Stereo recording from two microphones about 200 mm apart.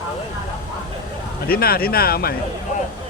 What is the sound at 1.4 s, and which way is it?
Speech, 50° left (ahead or behind).